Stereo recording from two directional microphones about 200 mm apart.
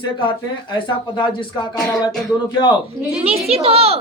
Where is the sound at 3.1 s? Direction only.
30° right (ahead or behind).